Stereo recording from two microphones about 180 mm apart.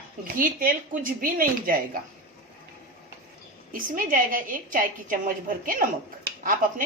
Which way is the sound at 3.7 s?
50° right (ahead or behind).